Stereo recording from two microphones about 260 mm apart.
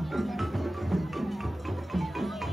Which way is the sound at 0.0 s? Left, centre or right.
Centre.